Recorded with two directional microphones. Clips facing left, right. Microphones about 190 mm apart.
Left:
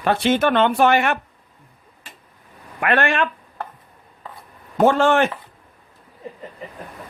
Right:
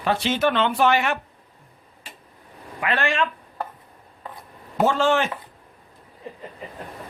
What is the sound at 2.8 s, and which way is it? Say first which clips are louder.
Speech: left 4 dB; 55° left (ahead or behind).